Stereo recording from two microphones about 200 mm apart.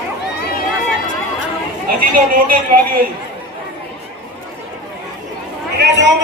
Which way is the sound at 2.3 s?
45° right (ahead or behind).